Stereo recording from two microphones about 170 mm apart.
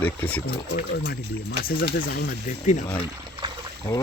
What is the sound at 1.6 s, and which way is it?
Speech, 60° left (ahead or behind).